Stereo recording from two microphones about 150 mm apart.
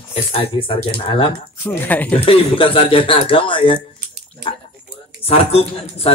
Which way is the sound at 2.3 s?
40° left (ahead or behind).